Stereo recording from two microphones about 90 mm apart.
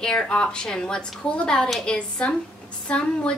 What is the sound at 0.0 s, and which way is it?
A woman's voice, 10° left (ahead or behind).